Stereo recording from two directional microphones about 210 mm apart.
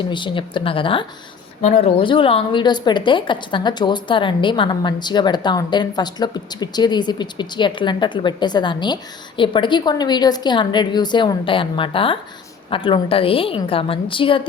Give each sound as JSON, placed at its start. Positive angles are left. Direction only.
{"t": 0.0, "sound": "a woman's voice", "side_deg": 20}